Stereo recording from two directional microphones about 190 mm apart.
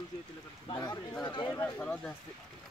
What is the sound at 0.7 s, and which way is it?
Speech, 20° left (ahead or behind).